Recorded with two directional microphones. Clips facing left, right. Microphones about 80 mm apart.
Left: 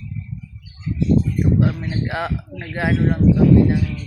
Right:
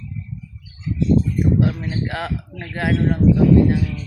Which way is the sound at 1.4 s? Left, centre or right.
Centre.